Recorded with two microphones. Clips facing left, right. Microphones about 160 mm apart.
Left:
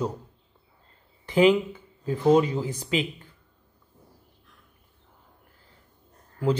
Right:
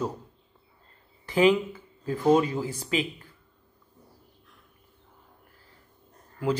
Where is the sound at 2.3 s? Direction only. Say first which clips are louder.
Left 2 dB; 20° left (ahead or behind).